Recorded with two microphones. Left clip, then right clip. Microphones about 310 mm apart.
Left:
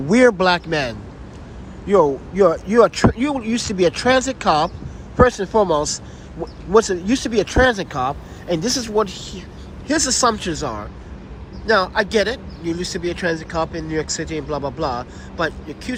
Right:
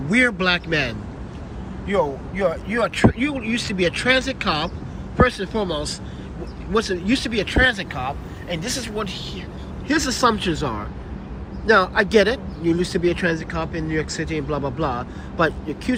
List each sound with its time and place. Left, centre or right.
0.1 s speech: centre
1.9 s a man's voice: left
2.6 s speech: centre